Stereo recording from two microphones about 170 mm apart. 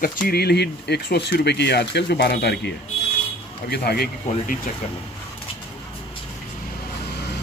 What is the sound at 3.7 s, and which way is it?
Speech, 65° left (ahead or behind).